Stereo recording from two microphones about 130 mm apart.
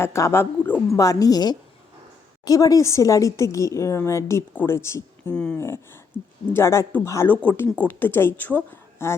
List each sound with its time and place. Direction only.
0.0 s a woman's voice: 20° left (ahead or behind)
5.3 s speech: 10° left (ahead or behind)
5.5 s a woman's voice: 20° left (ahead or behind)